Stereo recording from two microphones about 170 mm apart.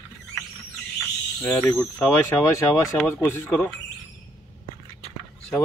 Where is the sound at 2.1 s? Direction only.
20° left (ahead or behind).